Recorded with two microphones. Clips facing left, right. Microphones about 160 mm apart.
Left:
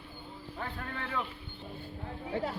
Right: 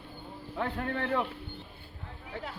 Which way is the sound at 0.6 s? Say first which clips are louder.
Right 7 dB; 60° right (ahead or behind).